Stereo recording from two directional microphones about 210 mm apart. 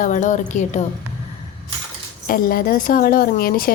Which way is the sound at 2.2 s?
45° left (ahead or behind).